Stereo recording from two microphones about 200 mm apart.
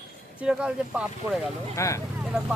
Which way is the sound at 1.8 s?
15° left (ahead or behind).